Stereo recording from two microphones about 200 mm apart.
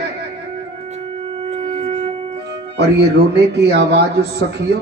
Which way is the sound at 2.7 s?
55° right (ahead or behind).